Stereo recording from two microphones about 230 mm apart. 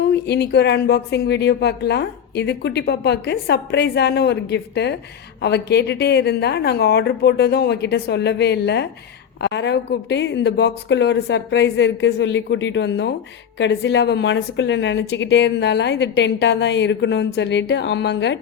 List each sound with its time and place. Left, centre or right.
0.0 s a woman's voice: left